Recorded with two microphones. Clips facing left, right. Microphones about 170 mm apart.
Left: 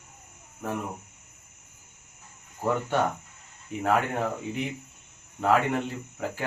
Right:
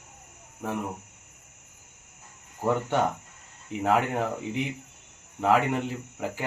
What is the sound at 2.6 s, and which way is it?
Speech, 15° right (ahead or behind).